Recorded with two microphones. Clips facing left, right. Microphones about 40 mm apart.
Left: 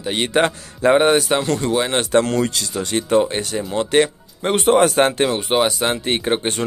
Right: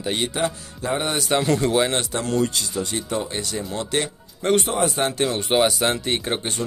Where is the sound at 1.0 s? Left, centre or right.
Left.